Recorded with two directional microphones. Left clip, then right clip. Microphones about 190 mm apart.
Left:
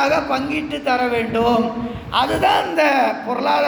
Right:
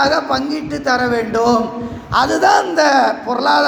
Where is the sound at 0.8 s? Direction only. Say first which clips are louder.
Right 3 dB; 10° right (ahead or behind).